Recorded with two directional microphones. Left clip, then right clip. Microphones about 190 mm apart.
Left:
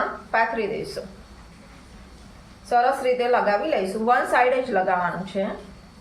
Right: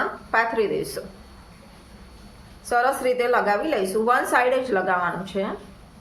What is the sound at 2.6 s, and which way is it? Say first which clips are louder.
A woman's voice: left 1 dB; 35° right (ahead or behind).